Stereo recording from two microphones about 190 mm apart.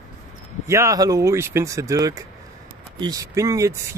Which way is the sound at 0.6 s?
15° right (ahead or behind).